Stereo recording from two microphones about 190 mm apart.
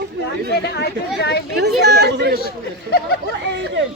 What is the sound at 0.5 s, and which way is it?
Speech, 60° left (ahead or behind).